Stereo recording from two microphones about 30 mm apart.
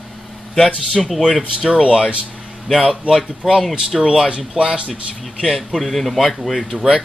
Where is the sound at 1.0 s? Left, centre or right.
Centre.